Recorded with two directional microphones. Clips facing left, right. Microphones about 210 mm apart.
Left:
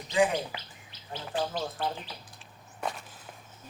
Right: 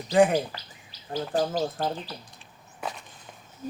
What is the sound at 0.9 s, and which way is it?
Speech, 40° right (ahead or behind).